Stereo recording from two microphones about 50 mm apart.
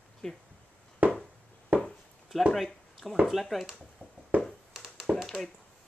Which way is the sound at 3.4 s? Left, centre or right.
Centre.